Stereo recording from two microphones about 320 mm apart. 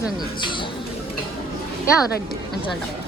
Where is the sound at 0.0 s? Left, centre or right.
Centre.